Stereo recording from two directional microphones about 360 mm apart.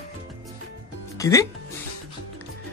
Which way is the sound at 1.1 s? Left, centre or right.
Centre.